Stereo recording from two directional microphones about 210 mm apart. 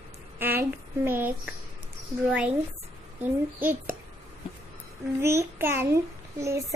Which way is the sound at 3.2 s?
10° right (ahead or behind).